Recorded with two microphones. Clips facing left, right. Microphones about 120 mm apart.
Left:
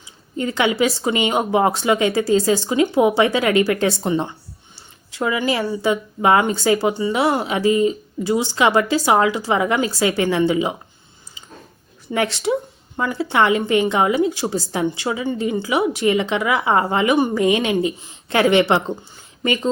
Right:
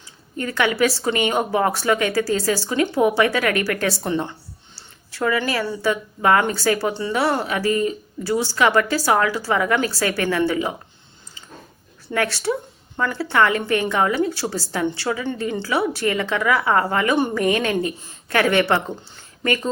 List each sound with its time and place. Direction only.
0.0 s a woman's voice: 20° left (ahead or behind)
12.0 s a woman's voice: 20° left (ahead or behind)